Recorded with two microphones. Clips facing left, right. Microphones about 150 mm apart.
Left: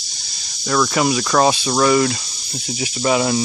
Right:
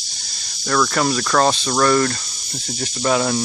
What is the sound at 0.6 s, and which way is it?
Speech, 10° left (ahead or behind).